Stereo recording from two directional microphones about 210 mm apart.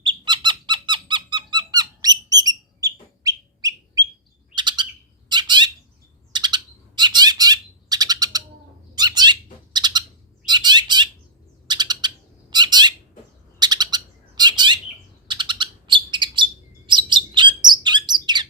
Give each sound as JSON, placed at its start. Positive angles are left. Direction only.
{"t": 0.0, "sound": "squeak", "side_deg": -20}
{"t": 4.5, "sound": "bird", "side_deg": -20}